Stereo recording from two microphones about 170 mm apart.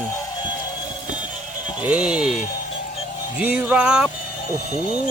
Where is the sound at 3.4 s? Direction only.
10° right (ahead or behind).